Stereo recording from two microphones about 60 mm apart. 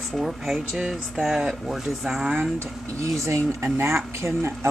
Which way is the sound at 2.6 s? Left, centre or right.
Right.